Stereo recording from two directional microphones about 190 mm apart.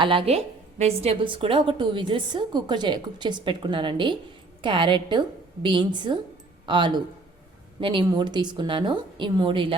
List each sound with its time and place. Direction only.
0.0 s a woman's voice: 25° right (ahead or behind)